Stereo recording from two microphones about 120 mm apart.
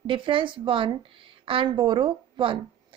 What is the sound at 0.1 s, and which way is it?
A woman's voice, 45° right (ahead or behind).